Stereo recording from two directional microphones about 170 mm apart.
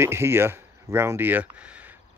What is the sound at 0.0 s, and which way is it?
Speech, 15° right (ahead or behind).